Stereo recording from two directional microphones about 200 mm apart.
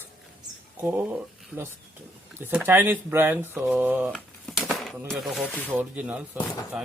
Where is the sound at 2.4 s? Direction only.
10° right (ahead or behind).